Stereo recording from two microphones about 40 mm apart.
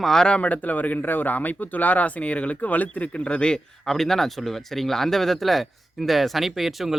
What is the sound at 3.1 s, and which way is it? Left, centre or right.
Speech, left.